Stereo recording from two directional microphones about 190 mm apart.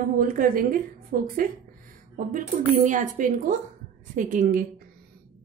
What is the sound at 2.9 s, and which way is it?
A woman's voice, 45° right (ahead or behind).